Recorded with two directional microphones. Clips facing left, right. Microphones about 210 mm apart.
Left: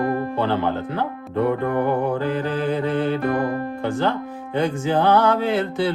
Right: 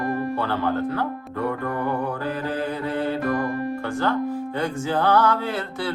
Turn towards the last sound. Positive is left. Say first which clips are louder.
# left 7 dB
turn(degrees=20)  # may be behind; listen again after turning